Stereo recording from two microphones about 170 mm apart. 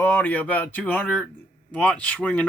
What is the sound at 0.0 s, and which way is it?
Speech, 10° left (ahead or behind).